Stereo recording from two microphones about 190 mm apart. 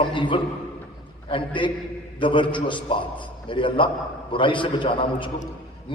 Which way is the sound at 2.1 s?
25° left (ahead or behind).